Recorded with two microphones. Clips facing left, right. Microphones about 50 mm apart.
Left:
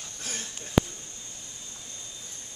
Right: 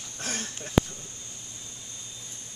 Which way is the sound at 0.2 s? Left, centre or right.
Right.